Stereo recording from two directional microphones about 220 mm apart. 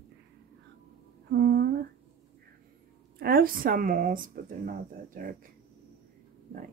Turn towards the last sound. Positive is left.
turn(degrees=-40)  # may be behind; listen again after turning